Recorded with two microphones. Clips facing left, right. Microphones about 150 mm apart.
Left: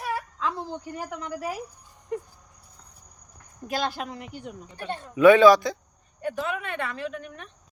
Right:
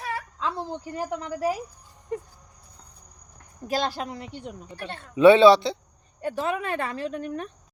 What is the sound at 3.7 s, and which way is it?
Speech, 35° right (ahead or behind).